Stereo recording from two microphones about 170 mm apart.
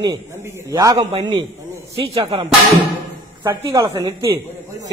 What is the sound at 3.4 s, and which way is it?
Speech, 15° right (ahead or behind).